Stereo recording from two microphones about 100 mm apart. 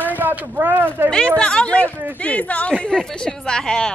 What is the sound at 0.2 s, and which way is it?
Speech, 15° right (ahead or behind).